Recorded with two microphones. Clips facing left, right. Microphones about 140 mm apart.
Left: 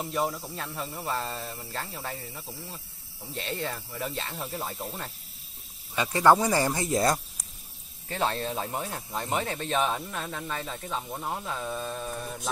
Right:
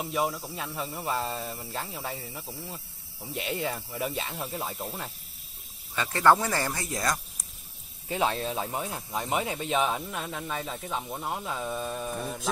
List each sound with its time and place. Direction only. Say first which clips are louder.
0.0 s speech: even; 5° right (ahead or behind)
5.9 s speech: left 1 dB; 15° left (ahead or behind)
8.1 s speech: right 1 dB; 5° right (ahead or behind)